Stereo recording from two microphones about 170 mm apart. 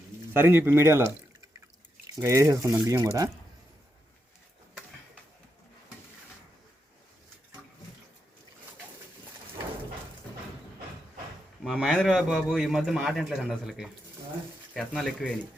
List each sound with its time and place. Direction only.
0.3 s speech: 10° right (ahead or behind)
2.1 s speech: 15° right (ahead or behind)
11.6 s a man's voice: centre (ahead or behind)